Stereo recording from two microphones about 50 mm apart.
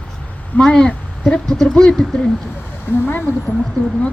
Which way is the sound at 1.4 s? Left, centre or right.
Centre.